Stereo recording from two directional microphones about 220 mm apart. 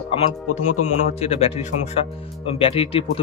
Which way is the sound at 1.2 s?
30° left (ahead or behind).